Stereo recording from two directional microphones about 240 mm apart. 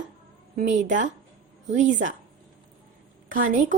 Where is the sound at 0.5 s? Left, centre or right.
Right.